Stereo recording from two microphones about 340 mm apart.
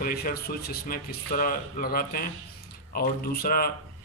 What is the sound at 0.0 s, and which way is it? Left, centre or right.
Speech, left.